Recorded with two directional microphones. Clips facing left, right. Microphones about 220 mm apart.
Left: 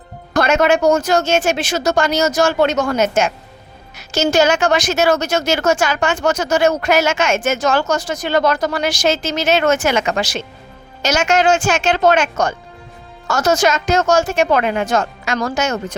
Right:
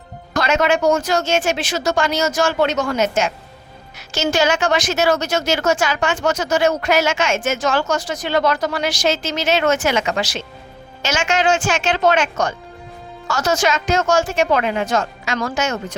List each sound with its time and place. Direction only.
0.3 s a woman's voice: 50° left (ahead or behind)
15.4 s speech: 40° left (ahead or behind)